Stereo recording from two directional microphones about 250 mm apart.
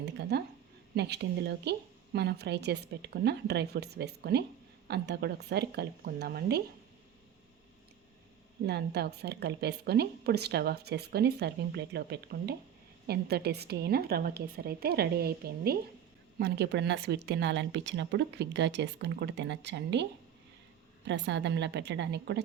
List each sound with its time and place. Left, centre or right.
0.2 s a woman's voice: right
8.6 s a woman's voice: right
21.1 s speech: right